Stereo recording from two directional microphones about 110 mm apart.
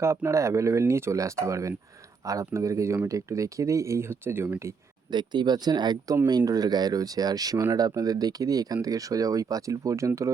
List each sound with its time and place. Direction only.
0.0 s speech: 25° right (ahead or behind)
5.1 s speech: 40° right (ahead or behind)